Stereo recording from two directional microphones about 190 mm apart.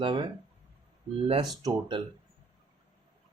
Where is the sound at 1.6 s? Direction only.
20° right (ahead or behind).